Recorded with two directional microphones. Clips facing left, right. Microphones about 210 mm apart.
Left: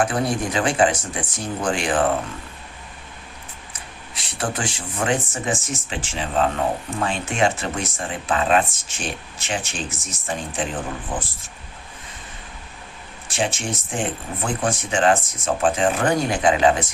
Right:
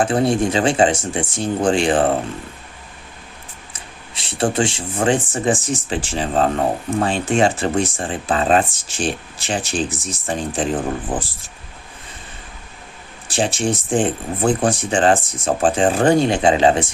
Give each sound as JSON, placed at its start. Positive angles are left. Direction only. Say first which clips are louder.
{"t": 0.0, "sound": "speech", "louder": "right 5 dB", "side_deg": -25}
{"t": 3.7, "sound": "speech", "louder": "right 1 dB", "side_deg": -25}
{"t": 13.2, "sound": "speech", "louder": "right 5 dB", "side_deg": -35}